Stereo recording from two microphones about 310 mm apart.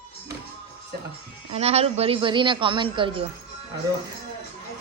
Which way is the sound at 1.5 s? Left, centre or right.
Centre.